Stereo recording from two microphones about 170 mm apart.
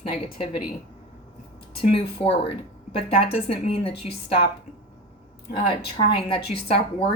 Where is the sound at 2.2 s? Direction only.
30° left (ahead or behind).